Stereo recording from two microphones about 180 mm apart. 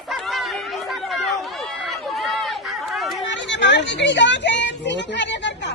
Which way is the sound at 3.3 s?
80° left.